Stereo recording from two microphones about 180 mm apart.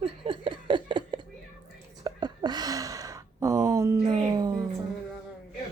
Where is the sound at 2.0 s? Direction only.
25° right (ahead or behind).